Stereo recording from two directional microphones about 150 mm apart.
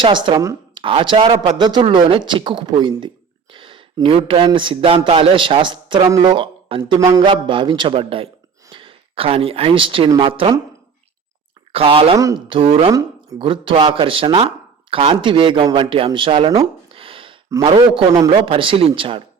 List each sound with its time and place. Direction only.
0.0 s speech: 30° right (ahead or behind)
11.7 s speech: 35° right (ahead or behind)
12.1 s speech: 20° right (ahead or behind)
12.5 s speech: 35° right (ahead or behind)
16.0 s a sound: 35° right (ahead or behind)
17.7 s speech: 30° right (ahead or behind)